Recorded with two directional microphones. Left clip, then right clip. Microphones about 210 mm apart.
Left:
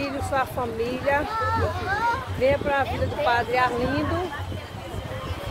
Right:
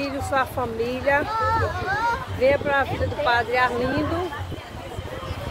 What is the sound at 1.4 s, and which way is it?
Speech, 35° right (ahead or behind).